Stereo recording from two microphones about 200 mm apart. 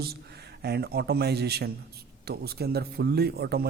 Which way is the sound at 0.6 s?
55° right (ahead or behind).